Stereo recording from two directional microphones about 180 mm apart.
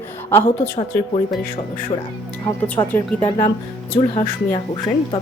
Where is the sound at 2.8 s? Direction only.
20° left (ahead or behind).